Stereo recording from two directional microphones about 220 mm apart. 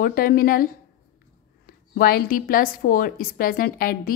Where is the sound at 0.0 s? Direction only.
40° left (ahead or behind).